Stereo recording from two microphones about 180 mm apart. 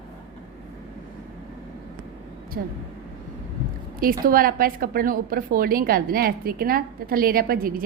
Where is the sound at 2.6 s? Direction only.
60° right (ahead or behind).